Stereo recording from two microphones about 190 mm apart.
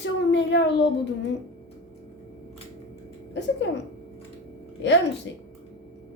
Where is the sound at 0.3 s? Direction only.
65° left (ahead or behind).